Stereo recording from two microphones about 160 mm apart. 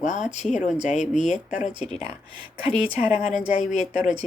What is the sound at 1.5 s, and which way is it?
Speech, 5° right (ahead or behind).